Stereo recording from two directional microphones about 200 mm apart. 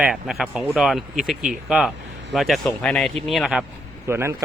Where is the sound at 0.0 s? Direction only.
Centre (ahead or behind).